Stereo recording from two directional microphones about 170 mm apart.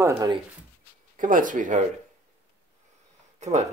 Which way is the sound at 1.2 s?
50° right (ahead or behind).